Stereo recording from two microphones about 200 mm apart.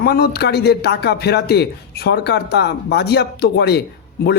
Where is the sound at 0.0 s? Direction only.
50° left (ahead or behind).